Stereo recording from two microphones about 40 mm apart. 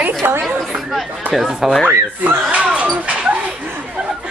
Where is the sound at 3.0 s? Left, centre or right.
Right.